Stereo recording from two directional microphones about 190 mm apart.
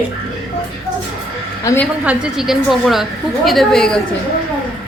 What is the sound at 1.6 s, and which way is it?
Speech, 15° left (ahead or behind).